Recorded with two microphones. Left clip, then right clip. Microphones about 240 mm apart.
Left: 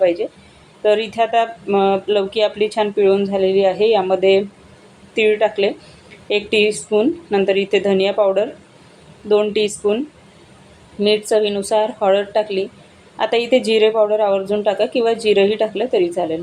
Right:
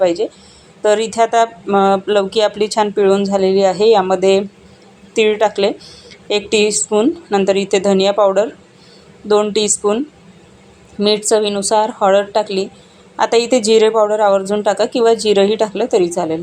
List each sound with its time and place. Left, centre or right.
0.0 s speech: right
11.0 s speech: right